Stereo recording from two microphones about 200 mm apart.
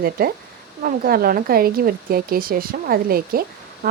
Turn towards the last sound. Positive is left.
turn(degrees=-50)  # may be behind; listen again after turning